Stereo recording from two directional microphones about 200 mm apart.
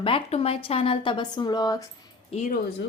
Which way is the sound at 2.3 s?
35° left (ahead or behind).